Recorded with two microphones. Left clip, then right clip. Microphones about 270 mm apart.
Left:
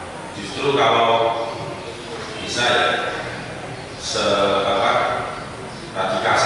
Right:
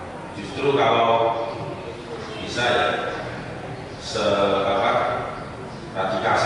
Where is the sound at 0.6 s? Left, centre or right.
Centre.